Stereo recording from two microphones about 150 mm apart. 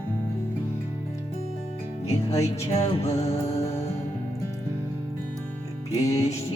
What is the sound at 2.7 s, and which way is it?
Music, 45° left (ahead or behind).